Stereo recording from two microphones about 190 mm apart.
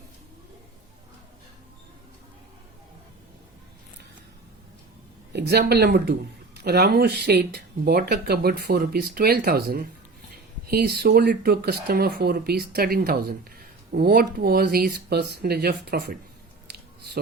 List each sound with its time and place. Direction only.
5.3 s speech: 60° right (ahead or behind)